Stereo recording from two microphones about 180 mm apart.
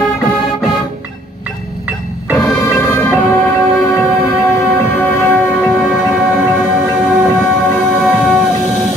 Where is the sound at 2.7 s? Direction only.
15° left (ahead or behind); by 6.4 s centre (ahead or behind).